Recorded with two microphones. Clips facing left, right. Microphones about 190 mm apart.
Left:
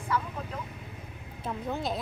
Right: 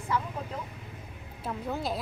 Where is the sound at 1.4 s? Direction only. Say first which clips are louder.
Even; 5° right (ahead or behind).